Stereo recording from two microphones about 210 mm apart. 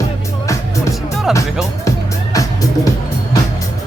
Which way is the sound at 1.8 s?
15° left (ahead or behind).